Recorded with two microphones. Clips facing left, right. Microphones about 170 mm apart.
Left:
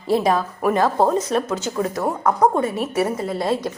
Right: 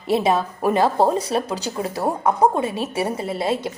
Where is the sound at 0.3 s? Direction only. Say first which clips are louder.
Even; 25° right (ahead or behind).